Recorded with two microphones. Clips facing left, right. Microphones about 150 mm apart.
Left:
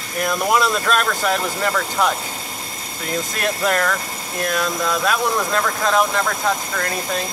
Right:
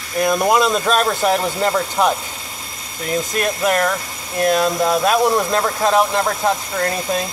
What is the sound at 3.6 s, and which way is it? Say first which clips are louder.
Speech: right 2 dB; 15° right (ahead or behind).